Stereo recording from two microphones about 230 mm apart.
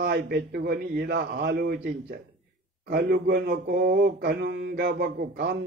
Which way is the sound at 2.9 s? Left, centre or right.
Right.